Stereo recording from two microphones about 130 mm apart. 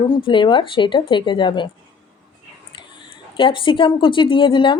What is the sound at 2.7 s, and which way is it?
Speech, 40° left (ahead or behind).